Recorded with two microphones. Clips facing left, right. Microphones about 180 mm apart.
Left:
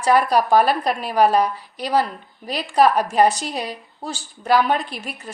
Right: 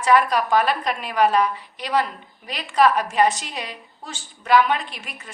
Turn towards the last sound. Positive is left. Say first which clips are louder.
# left 5 dB
turn(degrees=35)  # may be behind; listen again after turning